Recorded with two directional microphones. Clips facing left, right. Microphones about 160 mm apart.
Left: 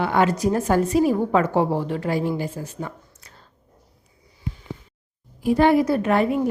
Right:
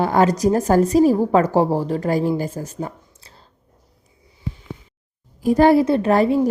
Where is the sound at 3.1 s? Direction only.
30° right (ahead or behind).